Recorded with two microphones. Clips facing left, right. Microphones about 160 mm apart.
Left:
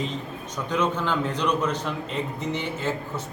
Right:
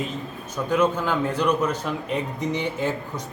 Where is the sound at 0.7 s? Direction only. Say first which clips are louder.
Right 3 dB; 10° right (ahead or behind).